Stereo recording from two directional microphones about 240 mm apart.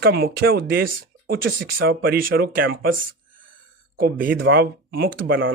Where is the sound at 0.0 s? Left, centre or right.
Right.